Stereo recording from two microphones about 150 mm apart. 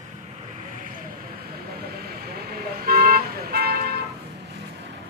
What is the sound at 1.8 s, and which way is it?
Vehicle, 90° right.